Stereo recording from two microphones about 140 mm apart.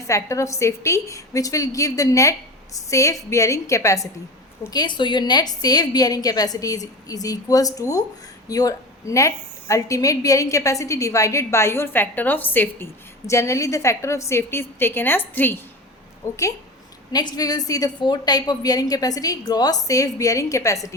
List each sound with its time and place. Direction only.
0.1 s a woman's voice: 20° left (ahead or behind)